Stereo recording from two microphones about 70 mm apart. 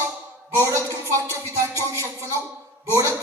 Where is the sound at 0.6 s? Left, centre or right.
Right.